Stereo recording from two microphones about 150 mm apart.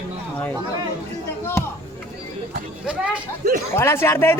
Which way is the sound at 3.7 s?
15° left (ahead or behind).